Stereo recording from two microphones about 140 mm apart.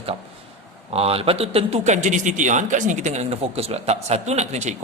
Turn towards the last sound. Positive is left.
turn(degrees=-55)  # may be behind; listen again after turning